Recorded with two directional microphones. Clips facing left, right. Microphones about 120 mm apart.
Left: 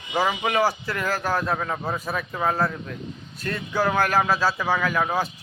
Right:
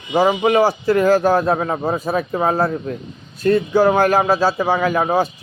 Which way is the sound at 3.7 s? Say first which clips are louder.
Right 5 dB; 20° right (ahead or behind).